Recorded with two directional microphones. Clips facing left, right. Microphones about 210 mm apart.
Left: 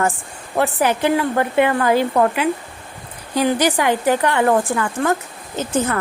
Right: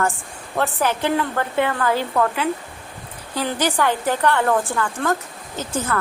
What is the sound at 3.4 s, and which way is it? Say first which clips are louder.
Speech: left 4 dB; 15° left (ahead or behind).